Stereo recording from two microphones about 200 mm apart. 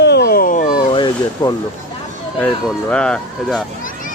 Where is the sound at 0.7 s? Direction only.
20° left (ahead or behind).